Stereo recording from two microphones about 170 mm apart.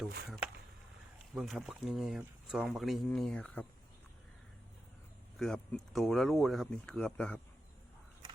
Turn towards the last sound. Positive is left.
turn(degrees=5)  # may be behind; listen again after turning